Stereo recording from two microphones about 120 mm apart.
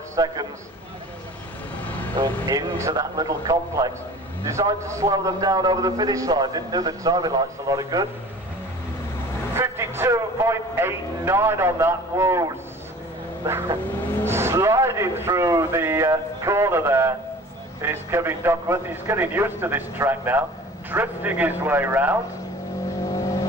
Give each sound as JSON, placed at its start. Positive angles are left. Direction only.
{"t": 0.1, "sound": "a man's voice", "side_deg": -30}
{"t": 1.8, "sound": "vehicle", "side_deg": 15}
{"t": 2.4, "sound": "a man's voice", "side_deg": -30}
{"t": 9.6, "sound": "speech", "side_deg": -20}
{"t": 13.5, "sound": "a man's voice", "side_deg": -20}
{"t": 23.0, "sound": "vehicle", "side_deg": 25}